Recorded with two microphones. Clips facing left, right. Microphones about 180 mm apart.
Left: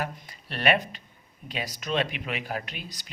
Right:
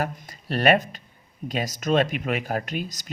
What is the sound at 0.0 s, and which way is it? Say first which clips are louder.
Speech: right 5 dB; 45° right (ahead or behind).